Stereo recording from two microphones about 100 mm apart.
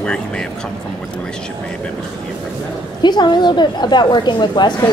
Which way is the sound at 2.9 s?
50° left (ahead or behind).